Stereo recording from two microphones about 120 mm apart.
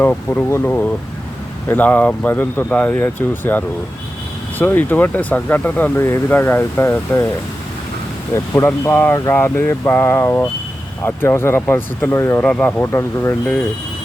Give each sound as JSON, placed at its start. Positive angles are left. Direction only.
{"t": 0.0, "sound": "speech", "side_deg": 15}
{"t": 8.3, "sound": "speech", "side_deg": 25}
{"t": 12.4, "sound": "speech", "side_deg": 10}